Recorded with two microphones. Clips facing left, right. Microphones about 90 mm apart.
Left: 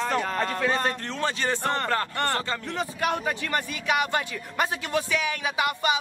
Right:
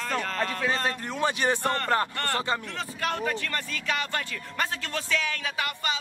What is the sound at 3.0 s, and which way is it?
A man's voice, 15° left (ahead or behind).